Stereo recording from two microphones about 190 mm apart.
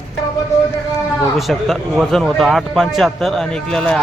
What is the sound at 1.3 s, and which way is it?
A man's voice, centre (ahead or behind).